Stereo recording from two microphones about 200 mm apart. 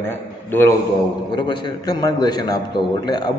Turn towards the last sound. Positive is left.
turn(degrees=20)  # may be behind; listen again after turning